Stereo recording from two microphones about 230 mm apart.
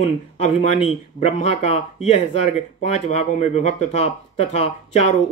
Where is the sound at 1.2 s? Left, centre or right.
Left.